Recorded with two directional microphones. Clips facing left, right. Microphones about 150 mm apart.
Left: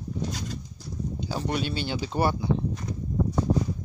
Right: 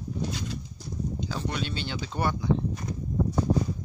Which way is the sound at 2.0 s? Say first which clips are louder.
Left 4 dB; 35° left (ahead or behind).